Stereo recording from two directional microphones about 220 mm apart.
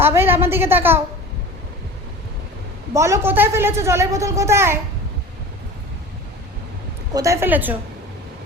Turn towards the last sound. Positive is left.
turn(degrees=-10)  # may be behind; listen again after turning